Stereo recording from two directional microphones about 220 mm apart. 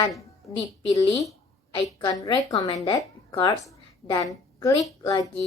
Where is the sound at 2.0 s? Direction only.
15° left (ahead or behind).